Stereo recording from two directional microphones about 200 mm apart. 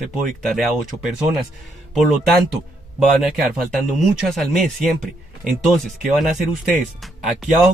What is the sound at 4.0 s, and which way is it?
Speech, centre (ahead or behind).